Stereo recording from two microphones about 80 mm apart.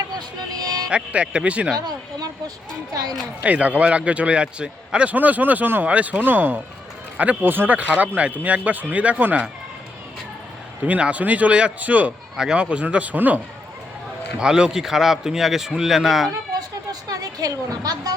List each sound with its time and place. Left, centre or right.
0.2 s music: right
0.9 s a man's voice: centre
1.8 s speech: right
3.4 s a man's voice: centre
10.8 s a man's voice: centre
14.3 s speech: centre
16.9 s a sound: right